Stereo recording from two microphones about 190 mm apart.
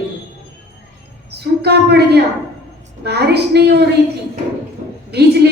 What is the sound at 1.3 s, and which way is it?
A woman's voice, 60° right (ahead or behind).